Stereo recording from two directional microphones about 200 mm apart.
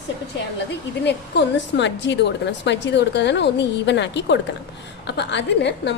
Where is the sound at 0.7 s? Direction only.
60° left (ahead or behind).